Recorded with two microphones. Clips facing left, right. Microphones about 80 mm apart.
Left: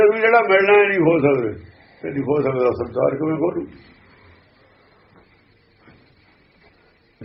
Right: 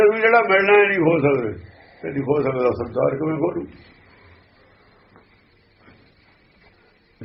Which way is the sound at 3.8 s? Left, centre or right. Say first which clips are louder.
Left 1 dB; left.